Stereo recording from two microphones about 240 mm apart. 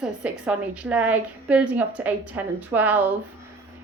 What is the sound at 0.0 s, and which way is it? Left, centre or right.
A woman's voice, centre.